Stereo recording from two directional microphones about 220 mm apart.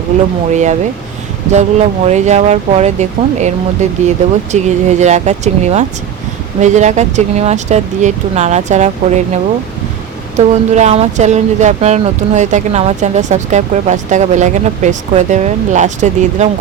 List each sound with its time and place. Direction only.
0.5 s speech: 35° right (ahead or behind)
4.5 s speech: 30° right (ahead or behind)